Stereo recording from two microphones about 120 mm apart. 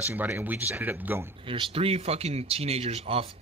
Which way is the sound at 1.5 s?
50° right (ahead or behind).